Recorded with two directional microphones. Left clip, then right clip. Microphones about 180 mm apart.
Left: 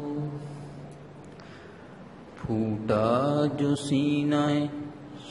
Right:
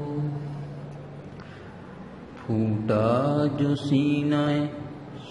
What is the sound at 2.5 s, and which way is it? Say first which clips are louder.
Mantra: right 1 dB; 15° left (ahead or behind).